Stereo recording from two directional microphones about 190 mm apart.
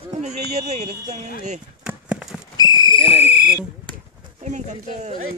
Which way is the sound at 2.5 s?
20° left (ahead or behind).